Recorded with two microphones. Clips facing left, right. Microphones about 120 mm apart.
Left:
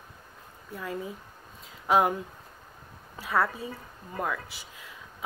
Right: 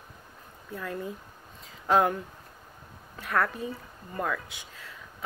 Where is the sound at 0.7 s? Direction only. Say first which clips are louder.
Even; 5° left (ahead or behind).